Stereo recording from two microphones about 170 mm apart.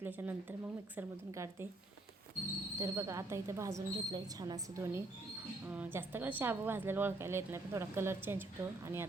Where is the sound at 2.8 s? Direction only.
15° right (ahead or behind).